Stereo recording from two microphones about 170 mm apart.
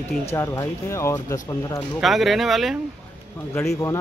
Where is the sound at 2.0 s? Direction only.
Centre (ahead or behind).